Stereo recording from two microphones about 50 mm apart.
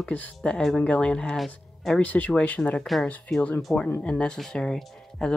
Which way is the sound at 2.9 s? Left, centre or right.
Centre.